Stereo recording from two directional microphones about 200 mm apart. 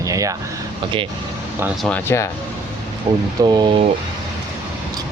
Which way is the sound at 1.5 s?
5° right (ahead or behind).